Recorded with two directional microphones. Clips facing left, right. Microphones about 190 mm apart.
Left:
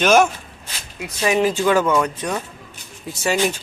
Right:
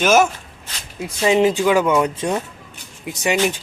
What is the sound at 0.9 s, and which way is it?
Speech, 25° right (ahead or behind).